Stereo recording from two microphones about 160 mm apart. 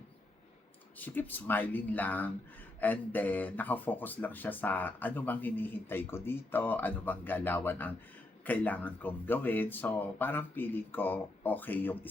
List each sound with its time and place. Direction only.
0.9 s speech: 10° left (ahead or behind)